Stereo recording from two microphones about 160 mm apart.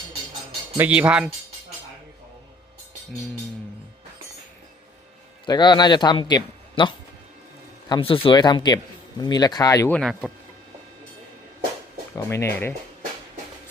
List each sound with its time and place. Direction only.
0.8 s speech: 10° right (ahead or behind)
5.5 s speech: 30° left (ahead or behind)
9.9 s speech: centre (ahead or behind)
12.1 s speech: 15° left (ahead or behind)